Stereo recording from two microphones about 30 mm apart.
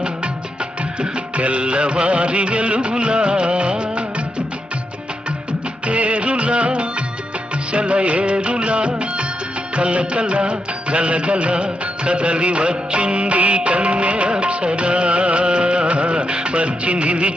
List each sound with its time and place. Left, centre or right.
0.9 s music of bollywood: right
5.8 s music: right
7.7 s music of bollywood: right
9.7 s music: right
14.3 s music: right